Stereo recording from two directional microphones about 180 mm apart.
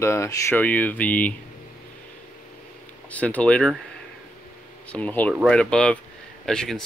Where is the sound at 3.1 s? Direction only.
5° left (ahead or behind).